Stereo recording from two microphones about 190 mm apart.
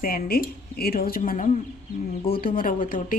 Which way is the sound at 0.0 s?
50° left (ahead or behind).